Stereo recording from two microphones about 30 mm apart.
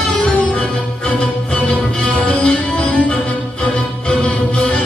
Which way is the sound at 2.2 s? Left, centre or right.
Left.